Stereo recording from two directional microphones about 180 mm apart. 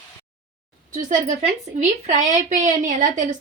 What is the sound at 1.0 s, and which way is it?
Speech, 45° right (ahead or behind).